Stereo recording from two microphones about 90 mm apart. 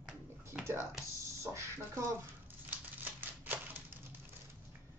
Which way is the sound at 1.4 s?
30° right (ahead or behind).